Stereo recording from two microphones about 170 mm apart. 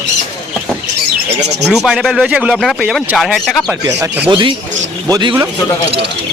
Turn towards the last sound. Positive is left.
turn(degrees=-25)  # may be behind; listen again after turning